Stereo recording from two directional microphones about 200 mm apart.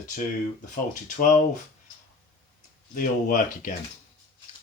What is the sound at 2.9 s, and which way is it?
Speech, 40° left (ahead or behind).